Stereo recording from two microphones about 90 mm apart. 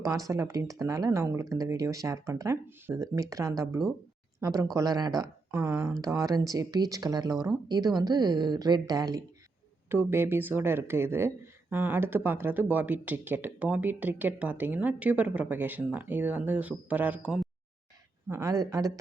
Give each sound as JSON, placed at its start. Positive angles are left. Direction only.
{"t": 0.0, "sound": "speech", "side_deg": -40}
{"t": 5.5, "sound": "speech", "side_deg": -30}
{"t": 9.9, "sound": "speech", "side_deg": -25}
{"t": 18.3, "sound": "speech", "side_deg": -35}